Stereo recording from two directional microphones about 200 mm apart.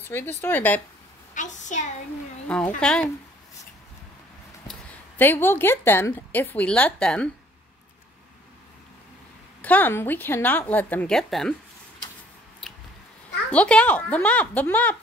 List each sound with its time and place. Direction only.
0.1 s a woman's voice: 10° left (ahead or behind)
1.3 s a woman's voice: 40° left (ahead or behind)
2.4 s speech: 5° left (ahead or behind)
4.6 s speech: 10° left (ahead or behind)
9.6 s a woman's voice: 10° left (ahead or behind)
13.5 s a woman's voice: 5° left (ahead or behind)